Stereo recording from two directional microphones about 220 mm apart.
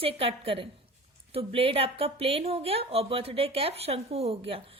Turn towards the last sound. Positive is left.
turn(degrees=-25)  # may be behind; listen again after turning